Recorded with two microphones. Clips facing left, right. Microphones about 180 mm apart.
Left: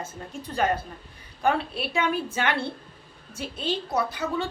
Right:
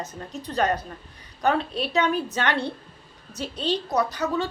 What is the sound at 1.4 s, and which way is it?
Speech, 10° left (ahead or behind).